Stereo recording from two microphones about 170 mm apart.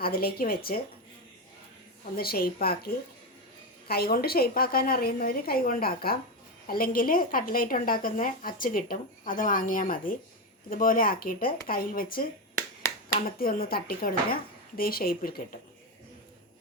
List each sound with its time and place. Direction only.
0.0 s a woman's voice: 65° left (ahead or behind)
2.1 s a woman's voice: 65° left (ahead or behind)
12.8 s a sound: 15° left (ahead or behind)
13.4 s a woman's voice: 60° left (ahead or behind)